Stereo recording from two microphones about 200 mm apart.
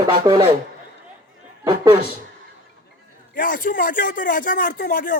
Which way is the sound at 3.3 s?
45° left (ahead or behind).